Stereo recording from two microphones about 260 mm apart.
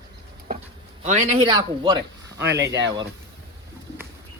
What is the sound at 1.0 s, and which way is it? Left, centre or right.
Speech, right.